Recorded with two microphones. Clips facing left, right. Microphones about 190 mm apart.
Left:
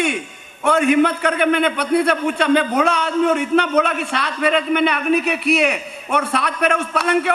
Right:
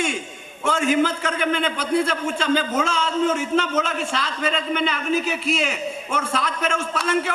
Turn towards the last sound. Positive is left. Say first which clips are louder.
# left 4 dB
turn(degrees=65)  # may be behind; listen again after turning